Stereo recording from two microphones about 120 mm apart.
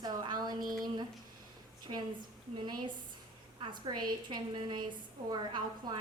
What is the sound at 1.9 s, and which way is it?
A woman's voice, 45° right (ahead or behind).